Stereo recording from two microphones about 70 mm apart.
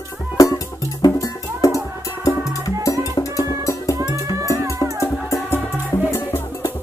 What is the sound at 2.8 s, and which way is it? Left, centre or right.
Music, left.